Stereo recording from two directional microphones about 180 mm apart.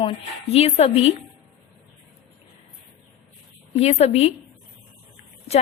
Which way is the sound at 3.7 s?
35° left (ahead or behind).